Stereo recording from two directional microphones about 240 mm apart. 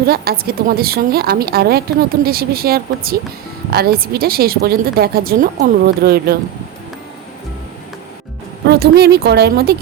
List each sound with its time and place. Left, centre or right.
0.1 s a woman's voice: right
8.6 s a woman's voice: right